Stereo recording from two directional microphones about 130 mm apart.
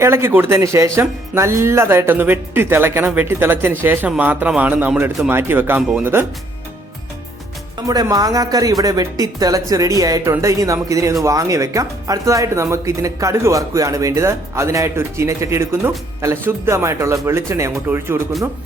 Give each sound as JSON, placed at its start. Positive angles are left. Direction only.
{"t": 0.0, "sound": "a man's voice", "side_deg": -20}
{"t": 7.9, "sound": "speech", "side_deg": -25}